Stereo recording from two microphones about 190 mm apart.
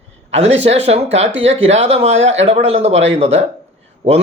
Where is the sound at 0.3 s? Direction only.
35° right (ahead or behind).